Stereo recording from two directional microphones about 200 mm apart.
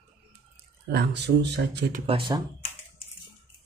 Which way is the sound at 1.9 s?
30° right (ahead or behind).